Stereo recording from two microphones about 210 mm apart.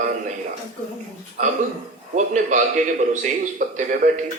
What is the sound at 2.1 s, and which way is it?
A woman's voice, 35° right (ahead or behind).